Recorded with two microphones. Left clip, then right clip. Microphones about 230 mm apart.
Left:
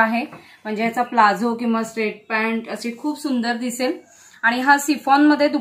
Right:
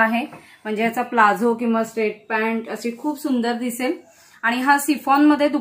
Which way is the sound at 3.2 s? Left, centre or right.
Centre.